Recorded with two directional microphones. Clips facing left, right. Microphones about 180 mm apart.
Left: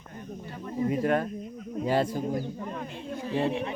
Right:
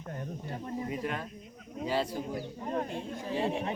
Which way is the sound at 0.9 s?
50° left (ahead or behind).